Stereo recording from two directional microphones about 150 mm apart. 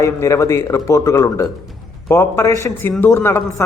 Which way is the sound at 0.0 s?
20° left (ahead or behind).